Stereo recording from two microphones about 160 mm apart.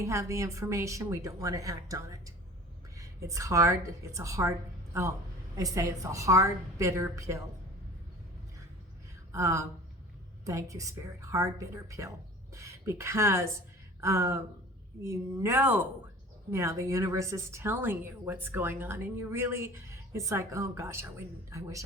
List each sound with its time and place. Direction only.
0.0 s speech: 20° right (ahead or behind)
5.5 s speech: 20° right (ahead or behind)
9.3 s speech: 20° right (ahead or behind)